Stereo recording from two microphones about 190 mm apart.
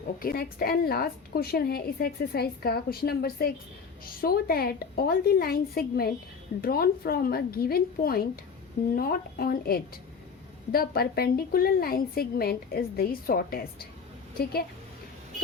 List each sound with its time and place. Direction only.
0.2 s a woman's voice: 50° left (ahead or behind)